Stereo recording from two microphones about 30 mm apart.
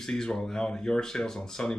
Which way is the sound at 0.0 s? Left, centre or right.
Centre.